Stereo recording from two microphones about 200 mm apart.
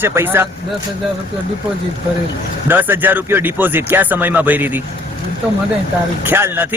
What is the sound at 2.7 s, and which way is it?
Speech, 10° right (ahead or behind).